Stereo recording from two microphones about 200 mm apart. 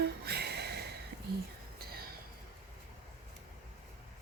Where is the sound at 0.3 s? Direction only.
55° right (ahead or behind).